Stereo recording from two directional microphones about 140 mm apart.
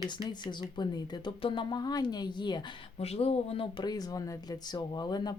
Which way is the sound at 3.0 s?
45° left (ahead or behind).